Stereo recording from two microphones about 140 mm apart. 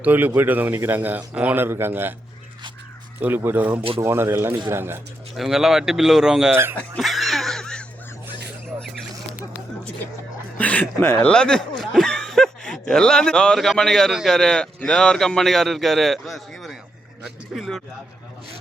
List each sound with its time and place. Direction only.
0.0 s a man's voice: 10° right (ahead or behind)
3.2 s a man's voice: 15° right (ahead or behind)
5.3 s speech: centre (ahead or behind)
6.5 s a man's voice: 15° right (ahead or behind)
7.0 s a sound: centre (ahead or behind)
10.6 s speech: 10° left (ahead or behind)